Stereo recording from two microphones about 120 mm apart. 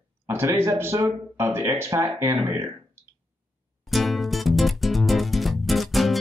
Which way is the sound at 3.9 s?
Centre (ahead or behind).